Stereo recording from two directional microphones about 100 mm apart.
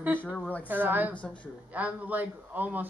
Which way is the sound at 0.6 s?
20° right (ahead or behind).